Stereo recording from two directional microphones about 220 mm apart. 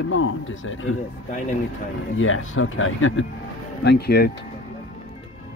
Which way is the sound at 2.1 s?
65° left (ahead or behind).